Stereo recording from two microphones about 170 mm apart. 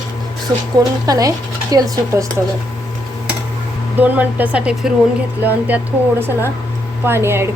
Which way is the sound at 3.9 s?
10° right (ahead or behind).